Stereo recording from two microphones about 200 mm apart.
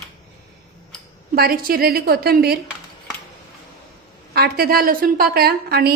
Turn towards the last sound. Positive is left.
turn(degrees=-50)  # may be behind; listen again after turning